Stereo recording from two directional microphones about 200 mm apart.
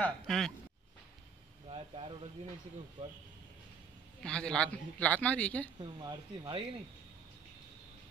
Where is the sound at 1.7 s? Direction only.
30° right (ahead or behind).